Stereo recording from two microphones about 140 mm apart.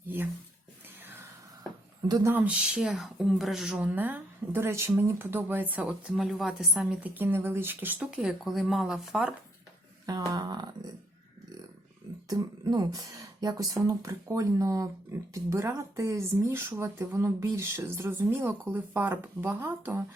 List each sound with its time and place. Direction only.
2.0 s speech: 30° right (ahead or behind)
2.3 s speech: 10° right (ahead or behind)
7.2 s speech: 15° right (ahead or behind)
10.1 s speech: 30° right (ahead or behind)
12.3 s speech: 30° right (ahead or behind)